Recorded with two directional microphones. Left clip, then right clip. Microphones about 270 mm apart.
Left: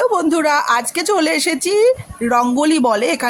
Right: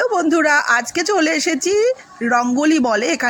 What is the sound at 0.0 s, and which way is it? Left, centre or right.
A woman's voice, left.